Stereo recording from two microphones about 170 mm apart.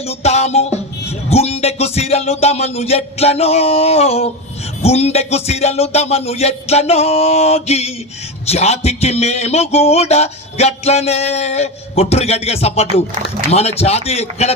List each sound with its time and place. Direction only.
0.0 s a man's voice: 40° left (ahead or behind)